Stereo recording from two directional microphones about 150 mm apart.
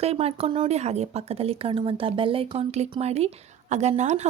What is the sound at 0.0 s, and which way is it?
A woman's voice, 40° right (ahead or behind).